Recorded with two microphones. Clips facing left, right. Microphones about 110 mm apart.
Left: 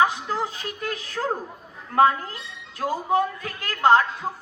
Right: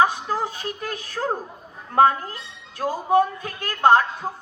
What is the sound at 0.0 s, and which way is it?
A woman's voice, 30° right (ahead or behind).